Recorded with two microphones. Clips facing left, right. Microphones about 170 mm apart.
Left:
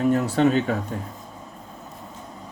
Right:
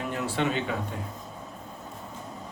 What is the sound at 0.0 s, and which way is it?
Speech, 40° left (ahead or behind).